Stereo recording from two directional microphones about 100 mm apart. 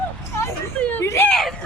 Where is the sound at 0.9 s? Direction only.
25° left (ahead or behind).